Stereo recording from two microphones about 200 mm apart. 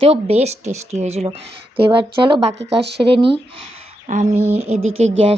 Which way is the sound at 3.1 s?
25° right (ahead or behind).